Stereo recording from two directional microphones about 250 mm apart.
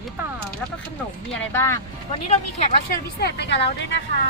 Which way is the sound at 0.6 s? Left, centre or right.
Centre.